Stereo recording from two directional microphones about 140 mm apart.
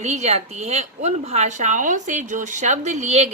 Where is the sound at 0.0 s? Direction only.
55° right (ahead or behind).